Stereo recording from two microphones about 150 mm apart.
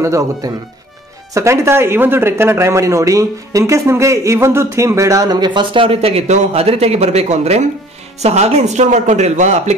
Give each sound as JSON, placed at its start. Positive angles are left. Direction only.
{"t": 0.0, "sound": "speech", "side_deg": -20}